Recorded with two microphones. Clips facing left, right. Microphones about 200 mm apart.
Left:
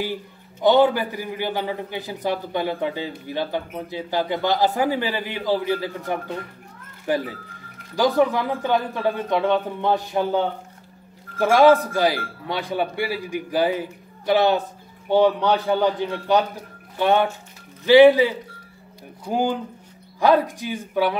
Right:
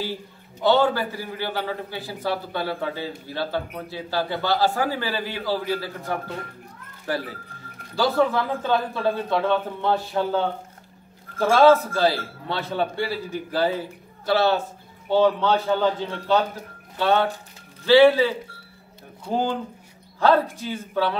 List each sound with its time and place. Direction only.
0.0 s a man's voice: 15° left (ahead or behind)
20.2 s a man's voice: 15° left (ahead or behind)